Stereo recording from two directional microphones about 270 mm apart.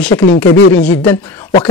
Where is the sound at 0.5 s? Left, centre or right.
Left.